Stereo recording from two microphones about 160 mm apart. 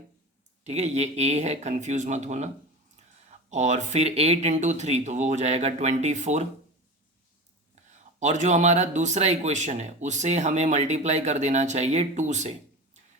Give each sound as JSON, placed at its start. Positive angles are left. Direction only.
{"t": 0.6, "sound": "speech", "side_deg": -45}
{"t": 8.2, "sound": "speech", "side_deg": -50}